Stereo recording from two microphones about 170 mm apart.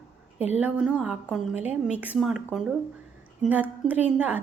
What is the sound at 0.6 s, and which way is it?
A woman's voice, 5° right (ahead or behind).